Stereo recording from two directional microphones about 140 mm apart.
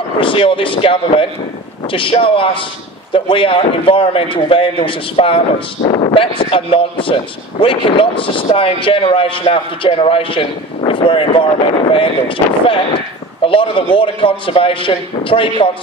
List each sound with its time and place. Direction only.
0.2 s speech: 40° left (ahead or behind)